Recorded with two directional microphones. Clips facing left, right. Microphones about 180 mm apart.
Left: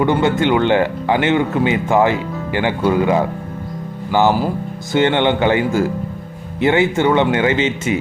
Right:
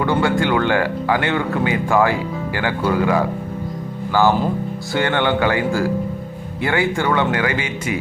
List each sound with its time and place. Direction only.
0.0 s speech: 20° left (ahead or behind)